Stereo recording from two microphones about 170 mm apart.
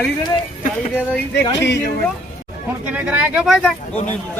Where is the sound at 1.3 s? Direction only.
90° left.